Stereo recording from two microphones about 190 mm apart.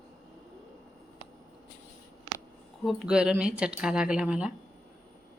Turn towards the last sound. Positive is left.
turn(degrees=-5)  # may be behind; listen again after turning